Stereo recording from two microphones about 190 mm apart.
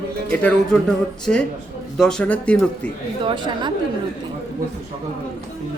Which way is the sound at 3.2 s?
25° right (ahead or behind).